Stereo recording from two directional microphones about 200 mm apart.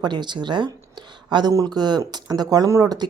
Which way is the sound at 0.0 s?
20° right (ahead or behind).